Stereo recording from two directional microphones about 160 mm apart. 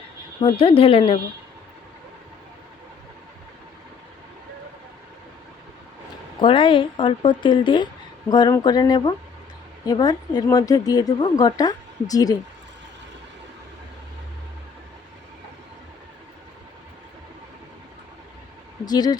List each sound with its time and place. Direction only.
0.4 s a woman's voice: 35° left (ahead or behind)
6.4 s a woman's voice: 30° left (ahead or behind)
18.9 s speech: 25° left (ahead or behind)